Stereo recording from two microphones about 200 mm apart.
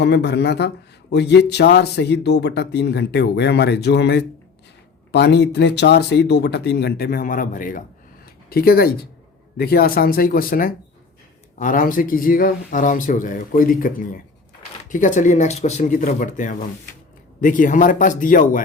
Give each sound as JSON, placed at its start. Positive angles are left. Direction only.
{"t": 0.0, "sound": "speech", "side_deg": 55}